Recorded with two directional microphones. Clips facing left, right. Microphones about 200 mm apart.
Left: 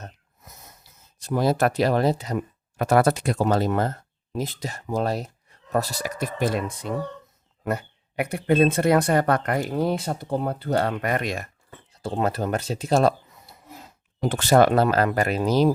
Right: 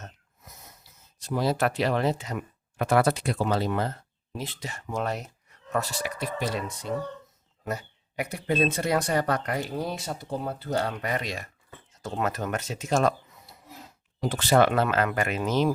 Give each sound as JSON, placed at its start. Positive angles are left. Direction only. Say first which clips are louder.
{"t": 0.0, "sound": "a sound", "louder": "left 3 dB", "side_deg": 45}
{"t": 1.3, "sound": "speech", "louder": "left 4 dB", "side_deg": 50}
{"t": 11.9, "sound": "speech", "louder": "left 4 dB", "side_deg": 30}
{"t": 14.2, "sound": "speech", "louder": "left 4 dB", "side_deg": 50}